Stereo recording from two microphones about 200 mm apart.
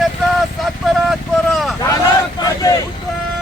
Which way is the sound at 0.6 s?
Centre (ahead or behind).